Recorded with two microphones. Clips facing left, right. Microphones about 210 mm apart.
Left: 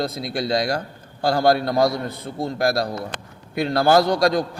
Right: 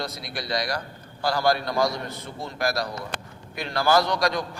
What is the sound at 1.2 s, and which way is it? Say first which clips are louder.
Speech: left 5 dB; 50° left (ahead or behind).